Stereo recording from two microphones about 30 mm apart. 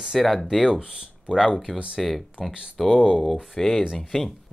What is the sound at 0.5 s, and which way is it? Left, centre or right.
Speech, centre.